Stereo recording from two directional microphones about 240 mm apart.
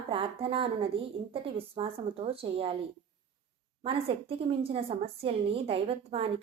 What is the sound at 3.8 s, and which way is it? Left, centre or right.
A woman's voice, right.